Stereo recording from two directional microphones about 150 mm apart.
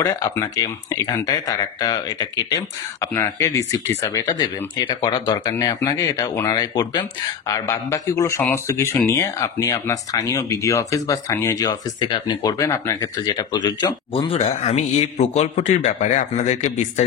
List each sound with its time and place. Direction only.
0.0 s speech: 20° left (ahead or behind)
4.4 s speech: 30° left (ahead or behind)
12.1 s speech: 35° left (ahead or behind); by 17.0 s 55° left (ahead or behind)